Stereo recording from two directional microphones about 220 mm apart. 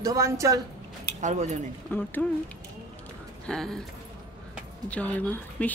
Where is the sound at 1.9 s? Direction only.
10° left (ahead or behind).